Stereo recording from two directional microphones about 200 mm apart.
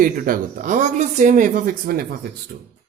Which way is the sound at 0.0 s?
45° right (ahead or behind).